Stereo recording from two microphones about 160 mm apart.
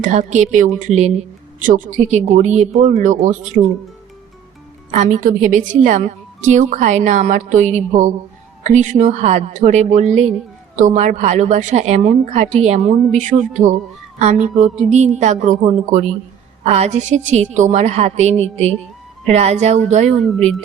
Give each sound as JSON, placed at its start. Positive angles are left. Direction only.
{"t": 0.0, "sound": "a woman's voice", "side_deg": -50}
{"t": 4.9, "sound": "a woman's voice", "side_deg": -50}
{"t": 20.2, "sound": "speech", "side_deg": 0}